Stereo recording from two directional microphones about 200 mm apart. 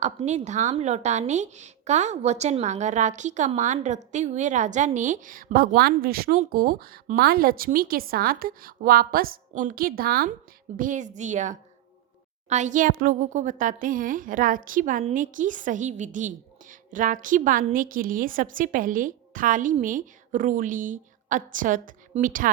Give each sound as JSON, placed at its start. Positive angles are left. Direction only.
{"t": 0.0, "sound": "a woman's voice", "side_deg": -35}